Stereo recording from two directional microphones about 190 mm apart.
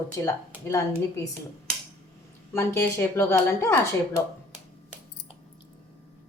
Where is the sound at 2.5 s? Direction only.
15° left (ahead or behind).